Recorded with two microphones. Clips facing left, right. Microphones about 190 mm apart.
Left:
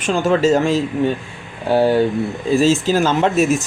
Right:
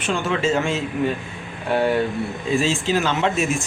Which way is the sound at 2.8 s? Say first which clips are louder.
Left 5 dB; 40° left (ahead or behind).